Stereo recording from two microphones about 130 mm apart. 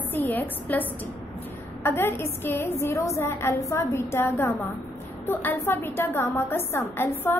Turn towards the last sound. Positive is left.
turn(degrees=20)  # may be behind; listen again after turning